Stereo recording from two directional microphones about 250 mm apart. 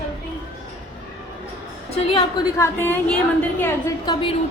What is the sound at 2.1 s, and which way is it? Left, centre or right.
A woman's voice, centre.